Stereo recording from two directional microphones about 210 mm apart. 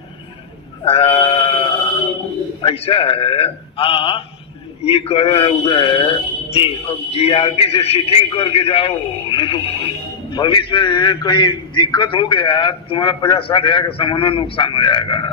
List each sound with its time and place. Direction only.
0.8 s sheep: 25° left (ahead or behind)
2.6 s a man's voice: 25° left (ahead or behind)